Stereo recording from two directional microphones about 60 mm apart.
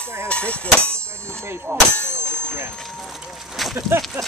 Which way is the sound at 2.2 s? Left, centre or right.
Centre.